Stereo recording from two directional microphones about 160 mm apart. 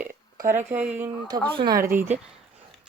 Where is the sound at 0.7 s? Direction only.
10° right (ahead or behind).